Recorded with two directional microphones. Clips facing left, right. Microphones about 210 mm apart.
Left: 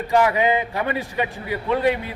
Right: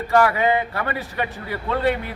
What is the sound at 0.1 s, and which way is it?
A man's voice, 15° left (ahead or behind).